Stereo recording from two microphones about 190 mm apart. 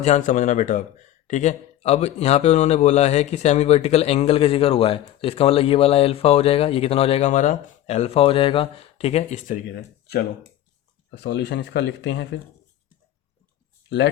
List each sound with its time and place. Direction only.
0.0 s a man's voice: 40° left (ahead or behind)
9.7 s speech: 55° left (ahead or behind)